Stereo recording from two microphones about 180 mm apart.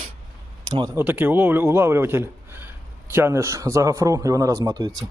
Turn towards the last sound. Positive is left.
turn(degrees=-20)  # may be behind; listen again after turning